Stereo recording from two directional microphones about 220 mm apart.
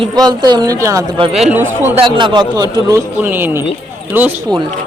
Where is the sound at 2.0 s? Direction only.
20° right (ahead or behind).